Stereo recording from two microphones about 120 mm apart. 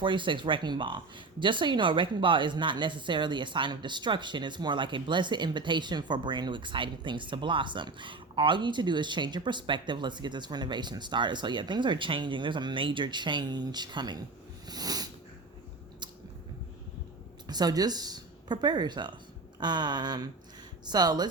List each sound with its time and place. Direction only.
0.0 s speech: 45° right (ahead or behind)
14.7 s a sound: 35° right (ahead or behind)
17.4 s speech: 35° right (ahead or behind)